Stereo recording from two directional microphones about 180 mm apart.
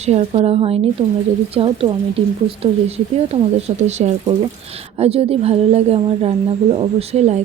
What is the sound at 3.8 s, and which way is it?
A woman's voice, 40° right (ahead or behind).